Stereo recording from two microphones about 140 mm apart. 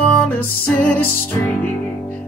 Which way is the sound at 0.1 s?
15° left (ahead or behind).